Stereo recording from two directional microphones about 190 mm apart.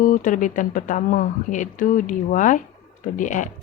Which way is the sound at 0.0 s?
45° left (ahead or behind).